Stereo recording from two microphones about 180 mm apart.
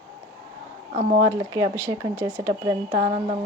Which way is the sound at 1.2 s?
20° right (ahead or behind).